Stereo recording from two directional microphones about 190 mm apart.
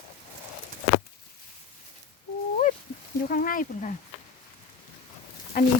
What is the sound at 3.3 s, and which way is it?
Speech, 45° left (ahead or behind).